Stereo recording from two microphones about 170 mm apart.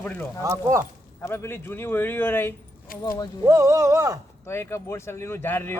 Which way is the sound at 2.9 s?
60° left (ahead or behind).